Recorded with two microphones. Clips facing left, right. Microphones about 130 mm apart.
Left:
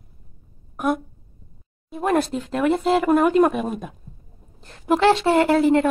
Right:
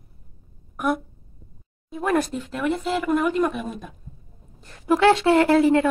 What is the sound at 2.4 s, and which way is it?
Speech, 40° left (ahead or behind).